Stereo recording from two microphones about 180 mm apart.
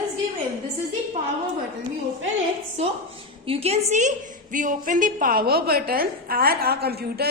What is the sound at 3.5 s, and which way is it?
A woman's voice, 35° right (ahead or behind).